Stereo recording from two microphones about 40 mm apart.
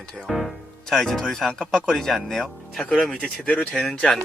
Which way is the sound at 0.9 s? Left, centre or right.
Centre.